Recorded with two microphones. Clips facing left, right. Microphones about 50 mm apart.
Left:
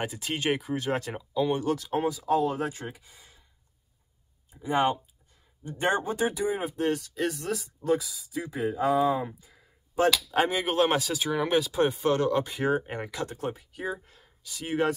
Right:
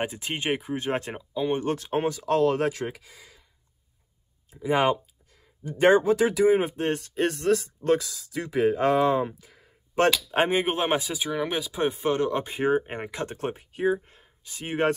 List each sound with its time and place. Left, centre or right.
0.0 s speech: right
1.1 s speech: centre
1.5 s speech: right
5.6 s speech: right
6.6 s speech: right
10.3 s speech: right
13.3 s speech: right